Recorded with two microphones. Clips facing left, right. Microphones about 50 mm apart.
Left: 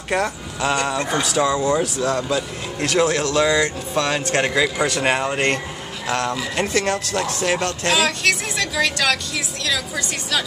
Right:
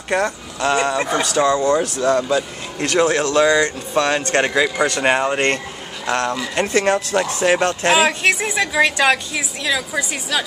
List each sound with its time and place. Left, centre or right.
0.1 s speech: centre